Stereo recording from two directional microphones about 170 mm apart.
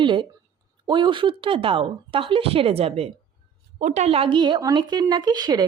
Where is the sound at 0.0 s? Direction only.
30° right (ahead or behind).